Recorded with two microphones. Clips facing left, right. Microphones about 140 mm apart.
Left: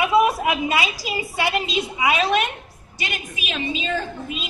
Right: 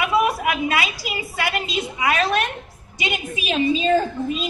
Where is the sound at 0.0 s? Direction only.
25° left (ahead or behind).